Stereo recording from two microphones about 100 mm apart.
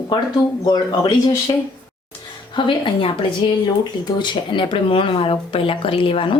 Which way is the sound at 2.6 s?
55° left (ahead or behind).